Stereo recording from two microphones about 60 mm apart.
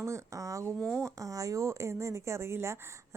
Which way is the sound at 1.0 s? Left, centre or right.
Right.